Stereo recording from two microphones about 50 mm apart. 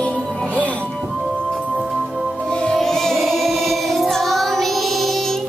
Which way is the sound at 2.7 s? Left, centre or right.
Centre.